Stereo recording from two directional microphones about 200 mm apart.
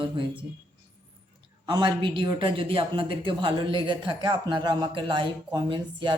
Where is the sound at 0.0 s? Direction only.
25° right (ahead or behind).